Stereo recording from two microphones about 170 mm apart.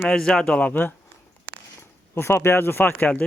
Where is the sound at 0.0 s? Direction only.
5° left (ahead or behind).